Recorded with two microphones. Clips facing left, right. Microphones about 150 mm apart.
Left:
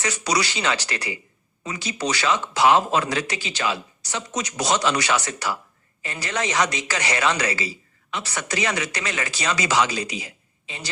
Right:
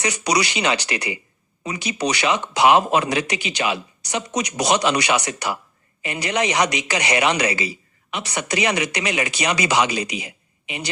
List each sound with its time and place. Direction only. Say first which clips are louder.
0.0 s speech: right 3 dB; 15° right (ahead or behind)